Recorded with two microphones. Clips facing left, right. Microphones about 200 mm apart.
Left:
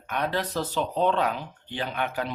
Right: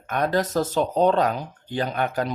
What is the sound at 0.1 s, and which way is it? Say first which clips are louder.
Speech: right 6 dB; 45° right (ahead or behind).